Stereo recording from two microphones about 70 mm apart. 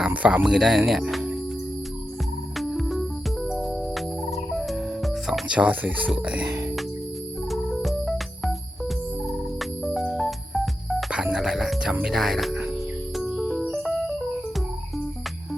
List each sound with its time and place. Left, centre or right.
0.1 s speech: right
0.4 s speech: centre
2.6 s music: centre
5.5 s speech: centre
6.2 s music: centre
6.5 s music: right
7.5 s music: centre
12.0 s speech: centre
13.1 s music: centre